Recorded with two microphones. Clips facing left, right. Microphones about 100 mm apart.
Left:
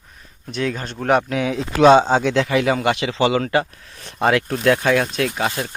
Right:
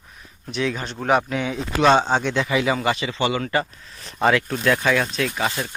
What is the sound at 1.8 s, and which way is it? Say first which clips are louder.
Speech: left 5 dB; 15° left (ahead or behind).